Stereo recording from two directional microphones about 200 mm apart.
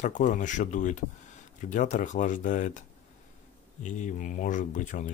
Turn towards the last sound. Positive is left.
turn(degrees=40)  # may be behind; listen again after turning